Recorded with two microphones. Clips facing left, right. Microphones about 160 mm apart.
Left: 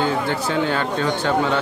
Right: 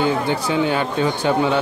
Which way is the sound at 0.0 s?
15° right (ahead or behind).